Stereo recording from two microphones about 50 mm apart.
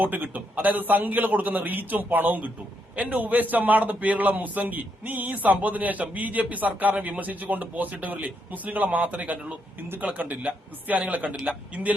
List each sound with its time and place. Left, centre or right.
0.0 s a man's voice: right